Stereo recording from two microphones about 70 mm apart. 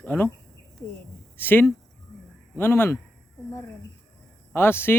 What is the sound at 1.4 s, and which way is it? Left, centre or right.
Speech, left.